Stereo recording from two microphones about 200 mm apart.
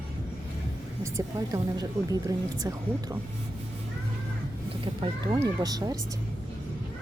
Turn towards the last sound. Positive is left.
turn(degrees=-20)  # may be behind; listen again after turning